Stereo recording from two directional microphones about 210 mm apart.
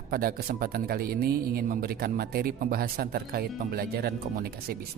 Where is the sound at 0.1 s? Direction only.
45° right (ahead or behind).